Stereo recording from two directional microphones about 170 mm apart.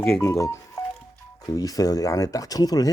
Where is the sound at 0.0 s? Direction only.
15° left (ahead or behind).